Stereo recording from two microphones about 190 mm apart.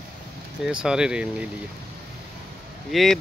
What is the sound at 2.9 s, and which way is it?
Speech, centre (ahead or behind).